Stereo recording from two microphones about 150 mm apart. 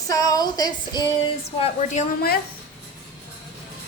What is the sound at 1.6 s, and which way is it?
Speech, 50° left (ahead or behind).